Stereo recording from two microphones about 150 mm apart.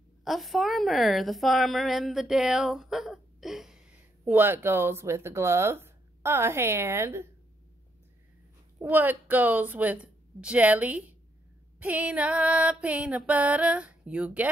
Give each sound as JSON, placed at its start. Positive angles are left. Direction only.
{"t": 0.2, "sound": "a woman's voice", "side_deg": 0}
{"t": 4.2, "sound": "speech", "side_deg": -15}
{"t": 8.8, "sound": "speech", "side_deg": -10}